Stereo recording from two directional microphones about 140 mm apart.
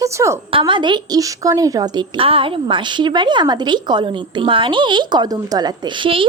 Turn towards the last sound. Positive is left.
turn(degrees=-35)  # may be behind; listen again after turning